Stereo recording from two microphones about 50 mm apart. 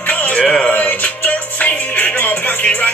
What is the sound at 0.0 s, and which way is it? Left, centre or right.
Music, left.